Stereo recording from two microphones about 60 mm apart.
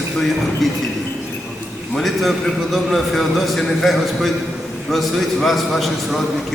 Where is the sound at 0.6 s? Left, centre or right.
Centre.